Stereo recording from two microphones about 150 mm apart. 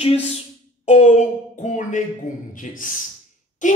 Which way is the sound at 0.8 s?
50° left (ahead or behind).